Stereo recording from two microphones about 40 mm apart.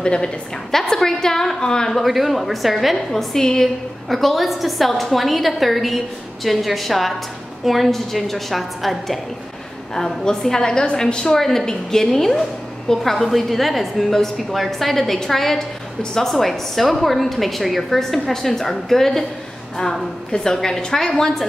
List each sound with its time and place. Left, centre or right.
0.0 s a woman's voice: left
0.7 s a woman's voice: centre
2.0 s a woman's voice: centre
3.1 s a woman's voice: centre
9.9 s a woman's voice: centre
20.3 s a woman's voice: centre